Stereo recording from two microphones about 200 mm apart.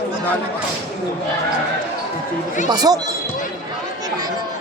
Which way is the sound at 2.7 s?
20° right (ahead or behind).